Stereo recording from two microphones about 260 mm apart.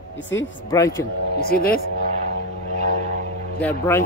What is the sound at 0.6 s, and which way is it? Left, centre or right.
Speech, centre.